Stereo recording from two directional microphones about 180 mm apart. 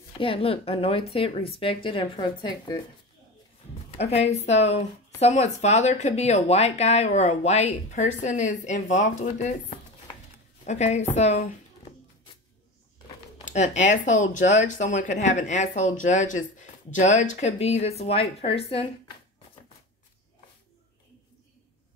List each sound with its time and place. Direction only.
0.2 s speech: 30° left (ahead or behind)
4.0 s a woman's voice: 35° left (ahead or behind)
13.5 s speech: 40° left (ahead or behind)